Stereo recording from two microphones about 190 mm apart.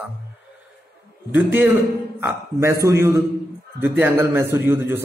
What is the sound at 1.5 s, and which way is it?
A man's voice, 10° right (ahead or behind).